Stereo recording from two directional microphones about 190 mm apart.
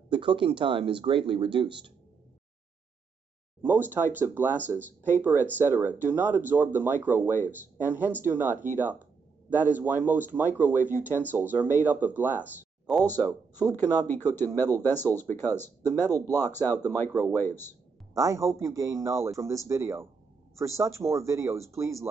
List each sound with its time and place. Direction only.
0.1 s speech: 25° right (ahead or behind)
3.6 s speech: 10° right (ahead or behind)
13.1 s speech: 10° left (ahead or behind)
18.1 s speech: 15° right (ahead or behind)